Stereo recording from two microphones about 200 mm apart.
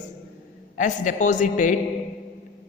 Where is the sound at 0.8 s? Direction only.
40° left (ahead or behind).